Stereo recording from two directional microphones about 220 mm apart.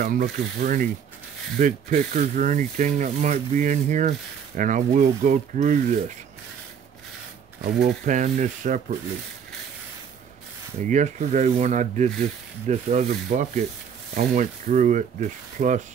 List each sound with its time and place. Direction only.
0.0 s speech: 40° right (ahead or behind)
7.6 s speech: 45° right (ahead or behind)
10.9 s speech: 35° right (ahead or behind)